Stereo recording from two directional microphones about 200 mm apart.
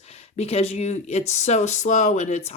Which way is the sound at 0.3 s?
30° left (ahead or behind).